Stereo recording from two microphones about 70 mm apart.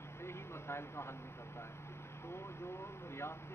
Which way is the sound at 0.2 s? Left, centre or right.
Left.